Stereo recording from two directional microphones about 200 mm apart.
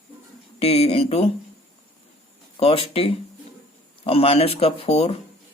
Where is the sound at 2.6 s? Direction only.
30° left (ahead or behind).